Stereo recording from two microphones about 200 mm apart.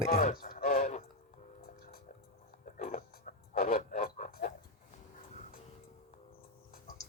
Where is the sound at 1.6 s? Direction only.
50° left (ahead or behind).